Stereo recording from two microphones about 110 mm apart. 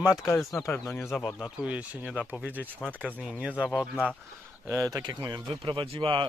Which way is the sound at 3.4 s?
10° right (ahead or behind).